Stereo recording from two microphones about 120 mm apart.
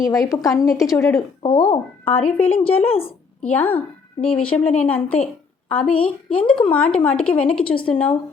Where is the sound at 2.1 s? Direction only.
55° left (ahead or behind).